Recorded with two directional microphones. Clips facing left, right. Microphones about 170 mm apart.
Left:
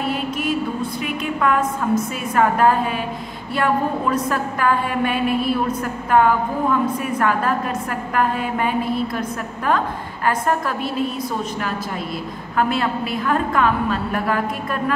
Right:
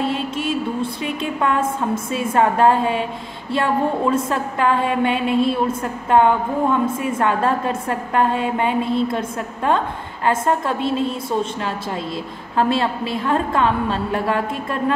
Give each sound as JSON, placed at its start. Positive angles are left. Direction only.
{"t": 0.0, "sound": "a sound", "side_deg": -25}
{"t": 1.0, "sound": "a woman's voice", "side_deg": -30}
{"t": 12.5, "sound": "a woman's voice", "side_deg": -30}